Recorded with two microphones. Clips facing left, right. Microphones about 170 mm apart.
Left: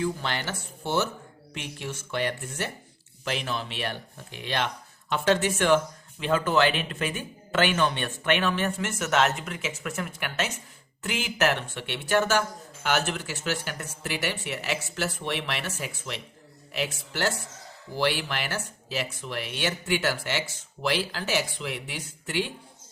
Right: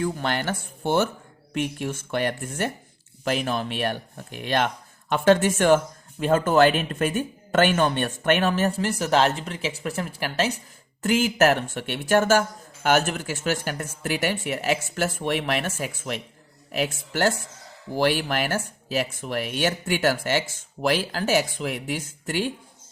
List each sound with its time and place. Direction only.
0.0 s speech: 50° right (ahead or behind)